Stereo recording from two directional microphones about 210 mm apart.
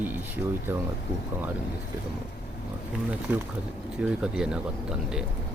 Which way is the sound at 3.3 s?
10° right (ahead or behind).